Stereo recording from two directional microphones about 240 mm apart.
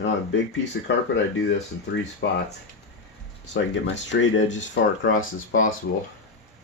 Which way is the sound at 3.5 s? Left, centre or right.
Left.